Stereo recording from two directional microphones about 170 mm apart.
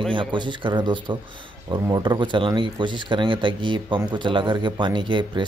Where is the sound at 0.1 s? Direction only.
30° right (ahead or behind).